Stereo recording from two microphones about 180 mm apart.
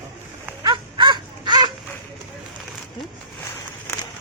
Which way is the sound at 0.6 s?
25° right (ahead or behind).